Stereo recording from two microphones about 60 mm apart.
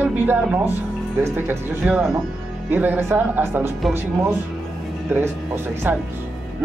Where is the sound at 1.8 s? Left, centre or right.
Right.